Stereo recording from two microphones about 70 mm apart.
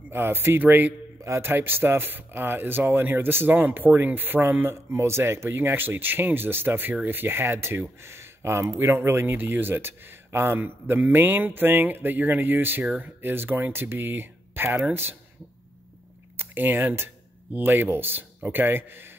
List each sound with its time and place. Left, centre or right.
0.1 s speech: right
16.3 s speech: right